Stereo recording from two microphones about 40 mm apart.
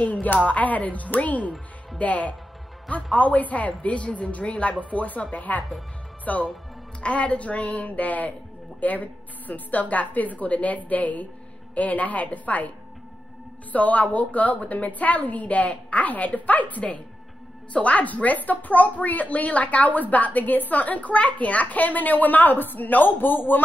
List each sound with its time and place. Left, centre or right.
0.0 s speech: left